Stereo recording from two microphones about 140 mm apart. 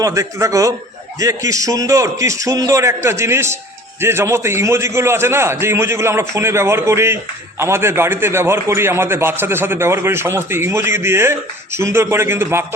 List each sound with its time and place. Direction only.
0.0 s a man's voice: 20° right (ahead or behind)